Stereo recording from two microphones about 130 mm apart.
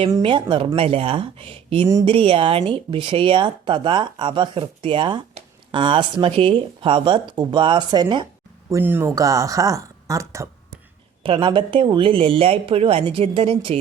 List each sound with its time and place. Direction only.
0.2 s speech: 40° right (ahead or behind)
8.7 s speech: 15° right (ahead or behind)
11.2 s speech: 40° right (ahead or behind)